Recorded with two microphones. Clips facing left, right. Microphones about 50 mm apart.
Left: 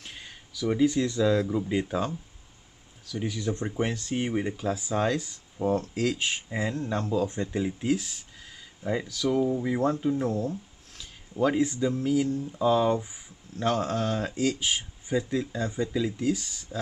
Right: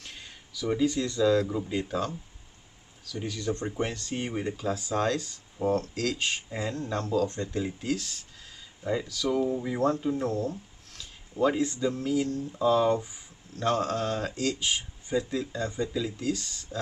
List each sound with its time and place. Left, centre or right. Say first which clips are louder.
0.0 s speech: left 1 dB; centre